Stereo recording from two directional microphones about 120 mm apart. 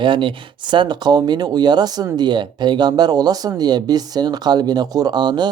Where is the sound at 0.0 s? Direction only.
45° right (ahead or behind).